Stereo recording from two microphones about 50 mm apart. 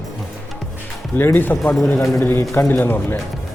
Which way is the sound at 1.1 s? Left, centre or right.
Left.